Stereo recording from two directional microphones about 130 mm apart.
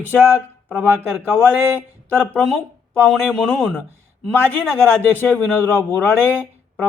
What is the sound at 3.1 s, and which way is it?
Speech, centre (ahead or behind).